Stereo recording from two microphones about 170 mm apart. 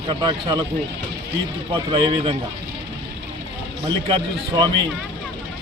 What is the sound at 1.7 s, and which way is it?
Speech, 30° right (ahead or behind).